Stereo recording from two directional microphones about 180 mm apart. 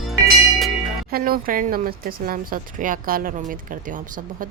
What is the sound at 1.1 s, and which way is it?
Speech, 55° right (ahead or behind).